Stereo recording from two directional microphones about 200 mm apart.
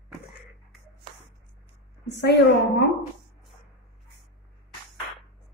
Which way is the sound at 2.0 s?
60° left (ahead or behind).